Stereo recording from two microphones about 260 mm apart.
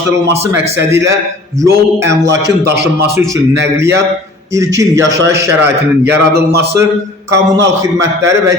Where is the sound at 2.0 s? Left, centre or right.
Right.